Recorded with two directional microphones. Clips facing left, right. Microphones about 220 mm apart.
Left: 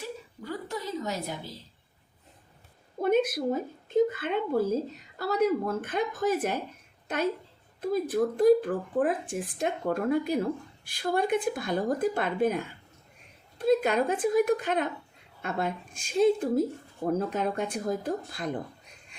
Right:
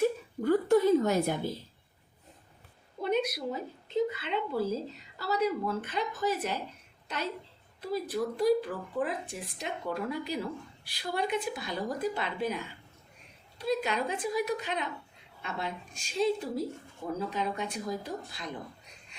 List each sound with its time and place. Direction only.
0.4 s a woman's voice: 50° right (ahead or behind)
3.0 s speech: 50° left (ahead or behind)